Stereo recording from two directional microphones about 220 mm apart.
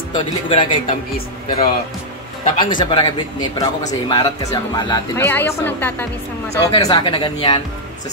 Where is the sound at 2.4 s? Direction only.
20° left (ahead or behind).